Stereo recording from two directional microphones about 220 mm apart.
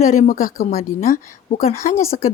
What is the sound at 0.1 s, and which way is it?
Speech, 35° left (ahead or behind).